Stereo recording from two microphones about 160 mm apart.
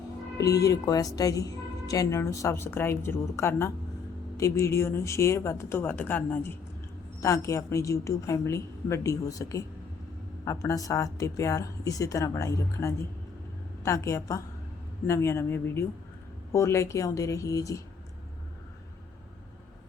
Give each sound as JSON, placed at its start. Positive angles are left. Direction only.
{"t": 0.3, "sound": "a woman's voice", "side_deg": 20}